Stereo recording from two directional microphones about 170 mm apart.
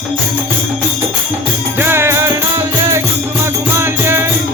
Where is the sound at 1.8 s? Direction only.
15° right (ahead or behind).